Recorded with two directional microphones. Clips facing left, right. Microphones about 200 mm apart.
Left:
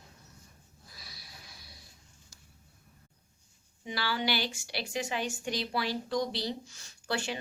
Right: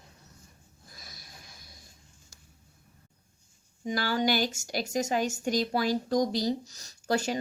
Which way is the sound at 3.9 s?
45° right (ahead or behind).